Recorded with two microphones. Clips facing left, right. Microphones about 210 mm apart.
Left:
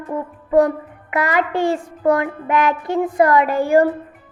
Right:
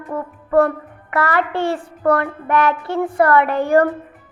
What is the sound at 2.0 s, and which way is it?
Music, 15° left (ahead or behind).